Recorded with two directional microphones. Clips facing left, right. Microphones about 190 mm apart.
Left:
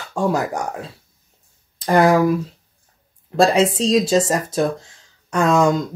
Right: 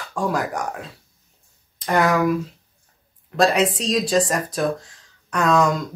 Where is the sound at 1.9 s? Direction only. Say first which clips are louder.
Left 4 dB; 30° left (ahead or behind).